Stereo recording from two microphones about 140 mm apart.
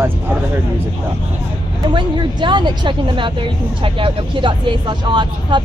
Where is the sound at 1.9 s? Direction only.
35° right (ahead or behind).